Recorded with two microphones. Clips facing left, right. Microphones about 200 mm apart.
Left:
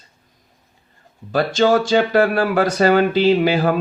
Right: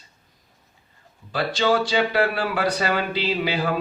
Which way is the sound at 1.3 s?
45° left (ahead or behind).